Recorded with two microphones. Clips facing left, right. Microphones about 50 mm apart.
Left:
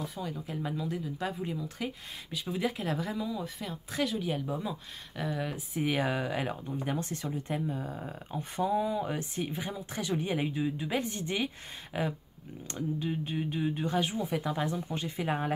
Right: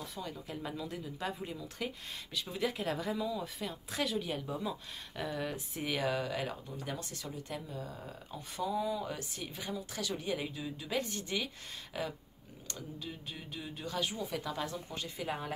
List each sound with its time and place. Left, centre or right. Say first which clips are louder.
0.0 s speech: left 5 dB; centre
5.9 s speech: left 3 dB; left